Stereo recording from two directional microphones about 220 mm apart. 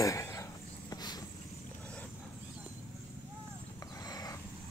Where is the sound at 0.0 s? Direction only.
15° left (ahead or behind).